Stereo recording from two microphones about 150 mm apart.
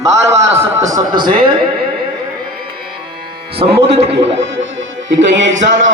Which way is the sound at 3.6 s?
40° right (ahead or behind).